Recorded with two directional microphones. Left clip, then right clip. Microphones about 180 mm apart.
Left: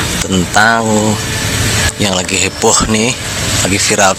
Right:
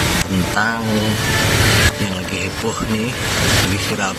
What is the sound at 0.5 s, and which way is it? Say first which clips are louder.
Speech: left 10 dB; 35° left (ahead or behind).